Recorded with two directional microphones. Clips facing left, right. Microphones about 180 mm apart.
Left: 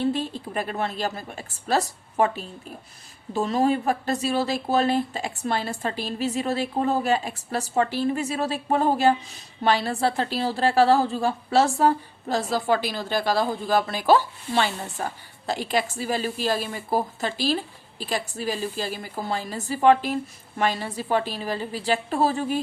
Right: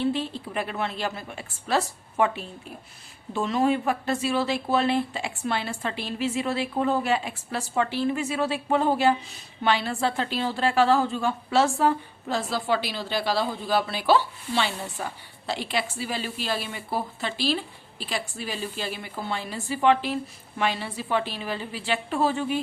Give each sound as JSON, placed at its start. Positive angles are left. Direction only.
{"t": 0.0, "sound": "a woman's voice", "side_deg": 45}